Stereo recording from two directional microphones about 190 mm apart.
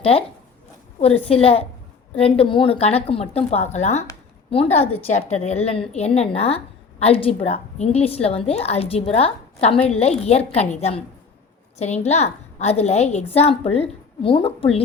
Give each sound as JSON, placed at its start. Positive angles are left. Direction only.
{"t": 0.0, "sound": "a woman's voice", "side_deg": 30}